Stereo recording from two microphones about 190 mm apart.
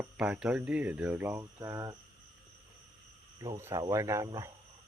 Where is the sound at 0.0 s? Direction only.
5° right (ahead or behind).